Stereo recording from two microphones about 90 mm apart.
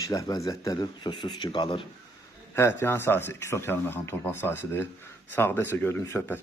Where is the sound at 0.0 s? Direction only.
40° left (ahead or behind).